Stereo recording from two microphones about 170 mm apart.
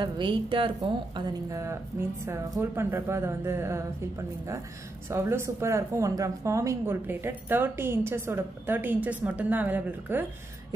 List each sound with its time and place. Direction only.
0.0 s a woman's voice: 30° right (ahead or behind)
1.5 s speech: 15° right (ahead or behind)
5.1 s speech: 15° right (ahead or behind)